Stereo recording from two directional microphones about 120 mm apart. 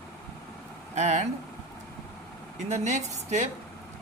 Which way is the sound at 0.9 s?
85° right.